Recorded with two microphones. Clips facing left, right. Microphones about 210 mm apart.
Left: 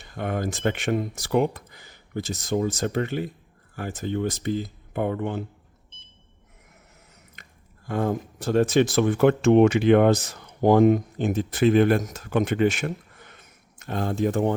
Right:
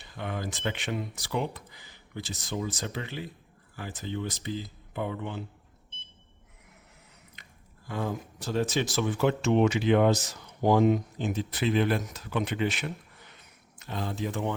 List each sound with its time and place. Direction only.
0.0 s speech: 50° left (ahead or behind)
7.9 s speech: 55° left (ahead or behind)